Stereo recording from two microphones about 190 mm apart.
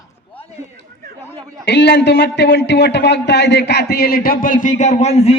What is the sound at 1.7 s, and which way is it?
Speech, 65° left (ahead or behind).